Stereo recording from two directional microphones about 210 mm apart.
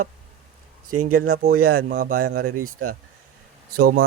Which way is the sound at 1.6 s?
90° right.